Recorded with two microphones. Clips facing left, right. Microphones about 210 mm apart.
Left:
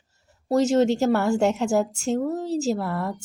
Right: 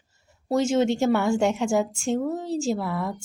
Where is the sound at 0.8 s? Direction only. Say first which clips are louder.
Left 2 dB; 40° left (ahead or behind).